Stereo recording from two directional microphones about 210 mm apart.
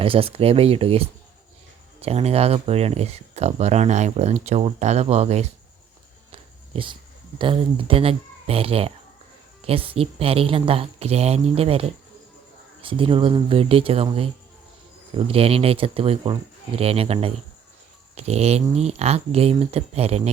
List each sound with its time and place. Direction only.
0.0 s speech: 25° right (ahead or behind)
6.3 s dog: 25° right (ahead or behind)
7.3 s speech: 25° right (ahead or behind)
15.3 s speech: 30° right (ahead or behind)